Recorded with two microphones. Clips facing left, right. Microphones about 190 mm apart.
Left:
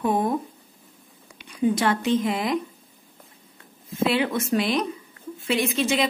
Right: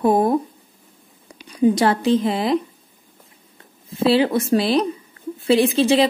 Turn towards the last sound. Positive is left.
turn(degrees=-30)  # may be behind; listen again after turning